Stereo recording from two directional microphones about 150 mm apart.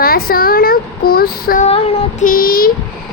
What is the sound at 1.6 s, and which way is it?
Child singing, 45° left (ahead or behind).